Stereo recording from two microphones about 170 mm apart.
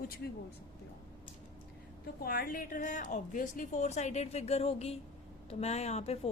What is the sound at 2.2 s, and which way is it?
A woman's voice, 65° left (ahead or behind).